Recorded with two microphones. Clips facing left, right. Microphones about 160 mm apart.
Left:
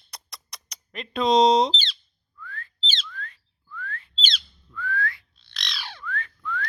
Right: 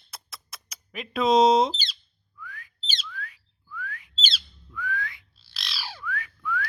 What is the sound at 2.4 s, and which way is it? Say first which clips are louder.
Whistling: left 4 dB; 10° right (ahead or behind).